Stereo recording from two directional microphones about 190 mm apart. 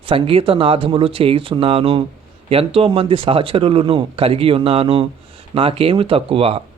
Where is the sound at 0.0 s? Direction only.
30° right (ahead or behind).